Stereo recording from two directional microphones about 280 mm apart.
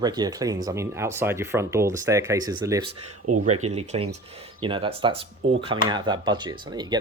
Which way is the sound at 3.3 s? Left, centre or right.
Right.